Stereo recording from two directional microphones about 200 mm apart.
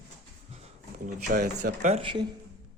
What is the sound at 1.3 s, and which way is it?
Speech, 45° right (ahead or behind).